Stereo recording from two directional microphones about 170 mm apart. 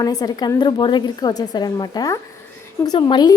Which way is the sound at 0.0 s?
20° left (ahead or behind).